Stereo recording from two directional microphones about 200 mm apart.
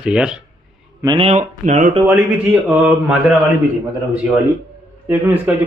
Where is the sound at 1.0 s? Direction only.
25° right (ahead or behind).